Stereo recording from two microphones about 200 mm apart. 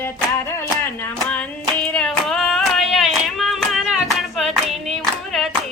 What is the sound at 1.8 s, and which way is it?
Hands, centre (ahead or behind).